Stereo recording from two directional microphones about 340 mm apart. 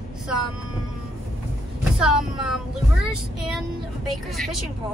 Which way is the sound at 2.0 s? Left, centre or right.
Centre.